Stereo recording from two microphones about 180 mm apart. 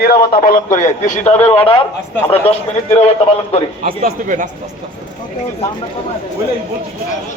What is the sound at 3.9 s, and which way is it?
Speech, 50° right (ahead or behind).